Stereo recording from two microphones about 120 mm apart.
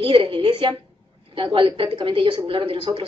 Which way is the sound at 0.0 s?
45° right (ahead or behind).